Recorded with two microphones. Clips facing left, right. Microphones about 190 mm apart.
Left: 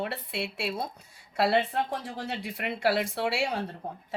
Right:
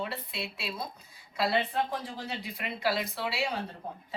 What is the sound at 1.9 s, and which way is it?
Speech, 70° left (ahead or behind).